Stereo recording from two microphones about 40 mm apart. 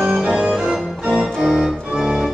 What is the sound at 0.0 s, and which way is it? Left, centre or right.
Organ, centre.